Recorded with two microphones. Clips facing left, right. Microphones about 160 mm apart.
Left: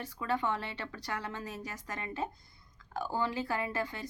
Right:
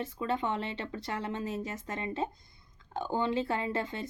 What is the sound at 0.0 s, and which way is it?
Speech, 25° right (ahead or behind).